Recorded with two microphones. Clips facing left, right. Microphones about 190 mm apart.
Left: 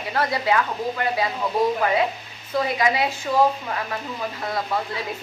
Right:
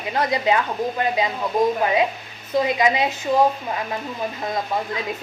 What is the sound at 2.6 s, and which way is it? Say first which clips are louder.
Speech: right 1 dB; 20° right (ahead or behind).